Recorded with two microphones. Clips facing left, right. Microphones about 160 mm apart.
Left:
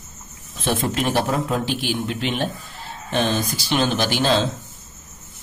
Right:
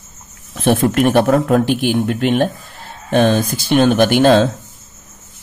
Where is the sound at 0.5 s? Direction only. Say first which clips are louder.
Right 9 dB; 60° right (ahead or behind).